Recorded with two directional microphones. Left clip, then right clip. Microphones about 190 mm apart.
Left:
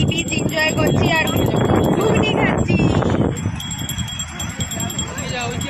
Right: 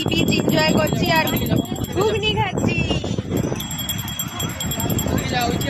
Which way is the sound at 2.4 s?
Centre (ahead or behind).